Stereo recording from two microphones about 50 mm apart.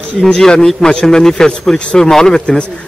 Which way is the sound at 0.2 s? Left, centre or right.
Centre.